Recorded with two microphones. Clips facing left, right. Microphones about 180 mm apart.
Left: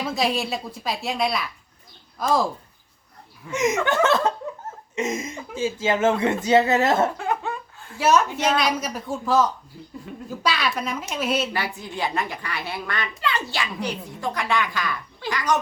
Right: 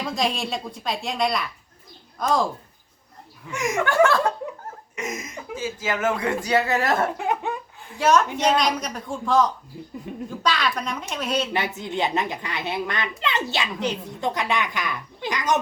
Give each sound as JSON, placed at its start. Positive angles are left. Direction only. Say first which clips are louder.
{"t": 0.0, "sound": "speech", "louder": "left 1 dB", "side_deg": 5}
{"t": 3.5, "sound": "speech", "louder": "left 2 dB", "side_deg": 20}
{"t": 7.2, "sound": "laughter", "louder": "right 1 dB", "side_deg": -20}
{"t": 7.9, "sound": "a woman's voice", "louder": "even", "side_deg": 5}
{"t": 10.1, "sound": "a child's voice", "louder": "right 4 dB", "side_deg": -20}
{"t": 10.4, "sound": "speech", "louder": "even", "side_deg": 5}
{"t": 11.5, "sound": "a child's voice", "louder": "right 3 dB", "side_deg": -20}